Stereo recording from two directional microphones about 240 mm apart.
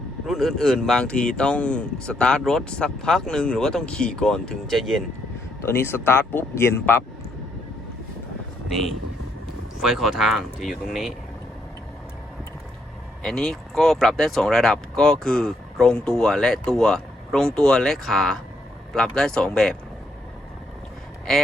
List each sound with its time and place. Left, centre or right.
0.3 s speech: centre
9.8 s speech: centre
13.2 s speech: centre